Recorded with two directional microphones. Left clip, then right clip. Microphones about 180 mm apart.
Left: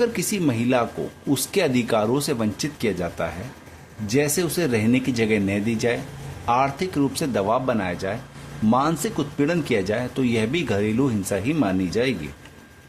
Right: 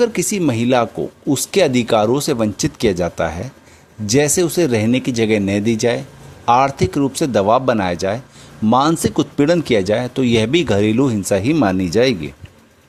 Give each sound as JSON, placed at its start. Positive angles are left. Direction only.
{"t": 0.0, "sound": "speech", "side_deg": -45}